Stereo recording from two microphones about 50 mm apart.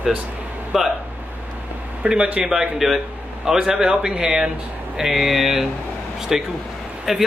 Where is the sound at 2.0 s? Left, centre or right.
Right.